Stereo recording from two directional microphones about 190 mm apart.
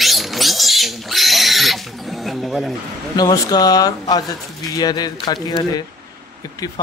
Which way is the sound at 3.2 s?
20° left (ahead or behind).